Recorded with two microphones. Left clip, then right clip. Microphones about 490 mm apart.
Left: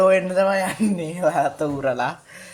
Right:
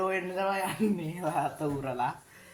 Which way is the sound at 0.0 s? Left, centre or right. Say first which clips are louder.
Left 13 dB; centre.